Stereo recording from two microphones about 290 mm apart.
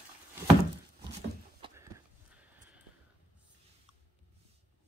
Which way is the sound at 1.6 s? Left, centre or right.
Centre.